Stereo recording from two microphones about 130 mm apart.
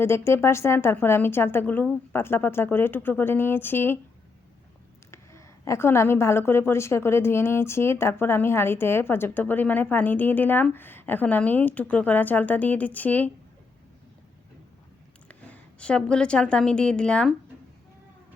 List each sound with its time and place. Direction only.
0.0 s a woman's voice: 20° left (ahead or behind)
5.1 s a woman's voice: 20° left (ahead or behind)
15.3 s a woman's voice: 10° left (ahead or behind)